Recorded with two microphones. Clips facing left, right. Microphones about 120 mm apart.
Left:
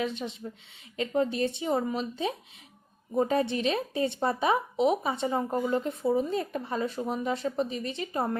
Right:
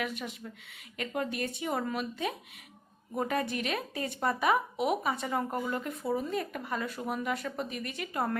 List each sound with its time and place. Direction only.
0.0 s speech: 25° left (ahead or behind)